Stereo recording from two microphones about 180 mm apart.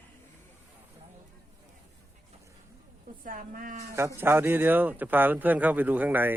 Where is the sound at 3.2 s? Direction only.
50° right (ahead or behind).